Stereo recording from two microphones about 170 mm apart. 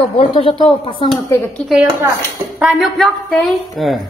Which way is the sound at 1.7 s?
10° right (ahead or behind).